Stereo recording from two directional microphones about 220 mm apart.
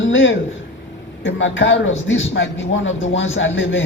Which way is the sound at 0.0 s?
60° left (ahead or behind).